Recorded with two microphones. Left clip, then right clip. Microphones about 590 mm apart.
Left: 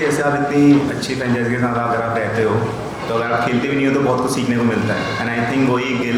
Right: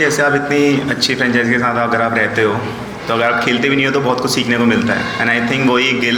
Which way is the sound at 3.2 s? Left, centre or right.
Right.